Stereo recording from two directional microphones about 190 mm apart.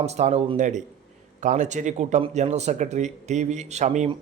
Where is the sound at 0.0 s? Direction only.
35° right (ahead or behind).